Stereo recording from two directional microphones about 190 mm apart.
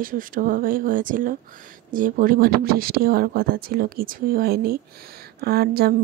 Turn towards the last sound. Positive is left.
turn(degrees=-55)  # may be behind; listen again after turning